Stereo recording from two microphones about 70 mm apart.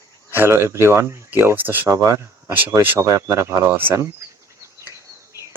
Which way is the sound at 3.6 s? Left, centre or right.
Right.